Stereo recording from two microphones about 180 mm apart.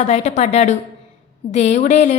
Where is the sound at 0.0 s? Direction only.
40° left (ahead or behind).